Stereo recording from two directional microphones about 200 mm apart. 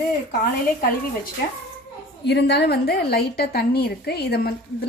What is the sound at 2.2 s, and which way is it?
A woman's voice, 55° left (ahead or behind).